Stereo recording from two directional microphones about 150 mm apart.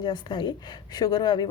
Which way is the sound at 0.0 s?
30° left (ahead or behind).